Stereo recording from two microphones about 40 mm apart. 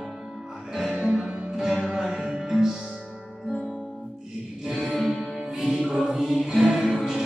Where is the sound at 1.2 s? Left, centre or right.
Right.